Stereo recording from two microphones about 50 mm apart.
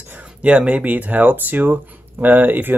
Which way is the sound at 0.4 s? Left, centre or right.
Right.